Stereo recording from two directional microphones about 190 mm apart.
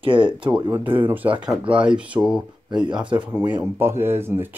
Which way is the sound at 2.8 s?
25° right (ahead or behind).